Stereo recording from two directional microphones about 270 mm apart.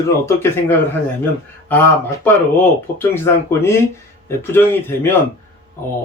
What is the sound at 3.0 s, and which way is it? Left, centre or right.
Speech, centre.